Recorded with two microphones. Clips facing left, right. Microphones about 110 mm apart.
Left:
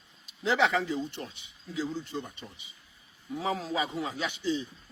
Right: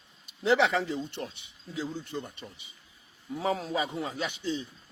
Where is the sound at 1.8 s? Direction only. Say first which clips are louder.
Left 1 dB; 55° right (ahead or behind).